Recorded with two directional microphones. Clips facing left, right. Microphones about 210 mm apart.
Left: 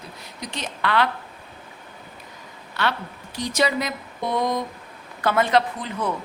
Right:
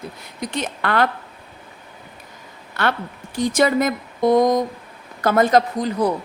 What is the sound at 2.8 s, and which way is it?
A woman's voice, 50° right (ahead or behind).